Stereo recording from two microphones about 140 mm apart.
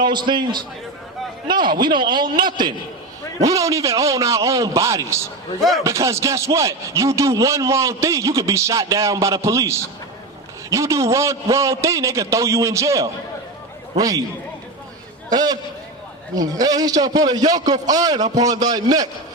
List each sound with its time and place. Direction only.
0.0 s a man's voice: 35° right (ahead or behind)
5.5 s speech: centre (ahead or behind)
5.8 s a man's voice: 20° right (ahead or behind)
15.3 s speech: 30° right (ahead or behind)